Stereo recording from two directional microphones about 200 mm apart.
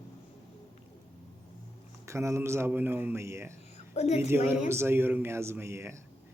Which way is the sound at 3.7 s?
30° left (ahead or behind).